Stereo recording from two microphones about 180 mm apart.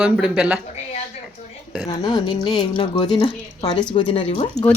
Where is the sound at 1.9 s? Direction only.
20° left (ahead or behind).